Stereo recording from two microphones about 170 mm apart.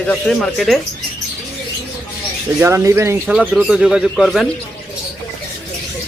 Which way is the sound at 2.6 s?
15° right (ahead or behind).